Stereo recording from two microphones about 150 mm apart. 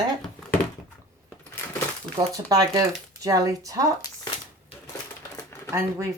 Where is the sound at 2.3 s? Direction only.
25° right (ahead or behind).